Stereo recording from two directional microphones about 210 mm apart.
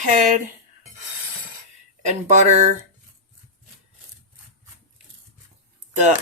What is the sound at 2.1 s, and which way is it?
Speech, 35° right (ahead or behind).